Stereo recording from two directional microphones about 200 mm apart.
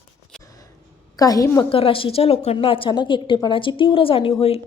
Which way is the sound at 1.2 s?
20° left (ahead or behind).